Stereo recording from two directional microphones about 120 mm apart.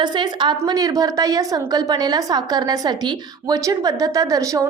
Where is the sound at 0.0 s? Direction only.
40° right (ahead or behind).